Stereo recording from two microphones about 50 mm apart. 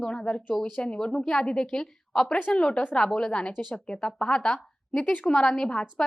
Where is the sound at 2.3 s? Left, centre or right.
Left.